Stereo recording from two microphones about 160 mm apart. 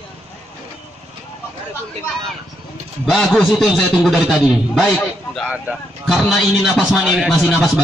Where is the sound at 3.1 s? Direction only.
Centre (ahead or behind).